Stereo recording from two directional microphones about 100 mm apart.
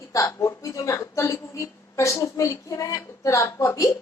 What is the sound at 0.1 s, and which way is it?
A woman's voice, 30° left (ahead or behind).